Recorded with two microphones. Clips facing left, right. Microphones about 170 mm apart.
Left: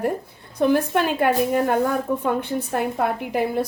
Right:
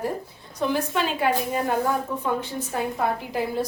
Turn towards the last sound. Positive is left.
turn(degrees=60)  # may be behind; listen again after turning